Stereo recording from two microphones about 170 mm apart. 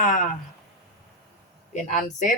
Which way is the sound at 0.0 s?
50° left (ahead or behind).